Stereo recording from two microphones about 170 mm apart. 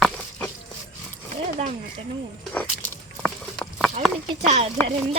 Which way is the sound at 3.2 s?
5° left (ahead or behind).